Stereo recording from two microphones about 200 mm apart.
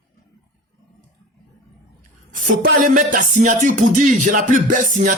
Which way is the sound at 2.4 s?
40° right (ahead or behind).